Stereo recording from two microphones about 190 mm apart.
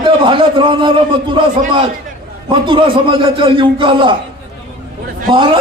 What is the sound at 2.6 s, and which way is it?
A man's voice, 25° right (ahead or behind).